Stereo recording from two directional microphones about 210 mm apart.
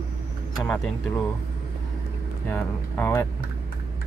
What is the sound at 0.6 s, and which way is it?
Speech, 5° left (ahead or behind).